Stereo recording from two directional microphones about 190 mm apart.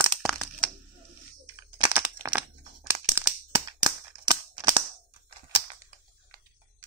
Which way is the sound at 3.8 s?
20° right (ahead or behind).